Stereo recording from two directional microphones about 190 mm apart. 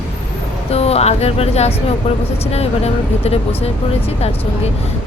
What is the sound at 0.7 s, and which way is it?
A woman's voice, 35° left (ahead or behind).